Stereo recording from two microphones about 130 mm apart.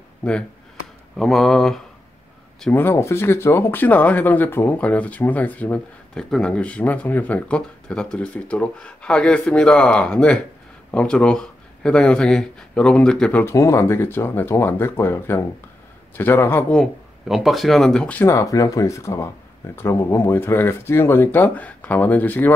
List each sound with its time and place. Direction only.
0.2 s speech: 5° left (ahead or behind)
2.7 s speech: 20° left (ahead or behind)
13.4 s speech: 20° left (ahead or behind)
16.7 s speech: centre (ahead or behind)